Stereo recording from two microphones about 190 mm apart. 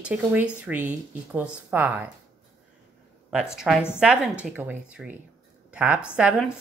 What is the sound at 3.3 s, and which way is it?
Speech, 5° right (ahead or behind).